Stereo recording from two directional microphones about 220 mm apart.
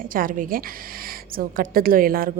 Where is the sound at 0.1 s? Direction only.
40° right (ahead or behind).